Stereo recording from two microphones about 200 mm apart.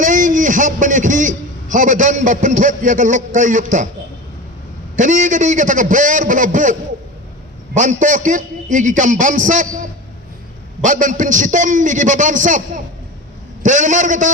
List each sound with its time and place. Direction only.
0.0 s a man's voice: 40° right (ahead or behind)
4.9 s a man's voice: 40° right (ahead or behind)
7.8 s a man's voice: 40° right (ahead or behind)
10.8 s a man's voice: 40° right (ahead or behind)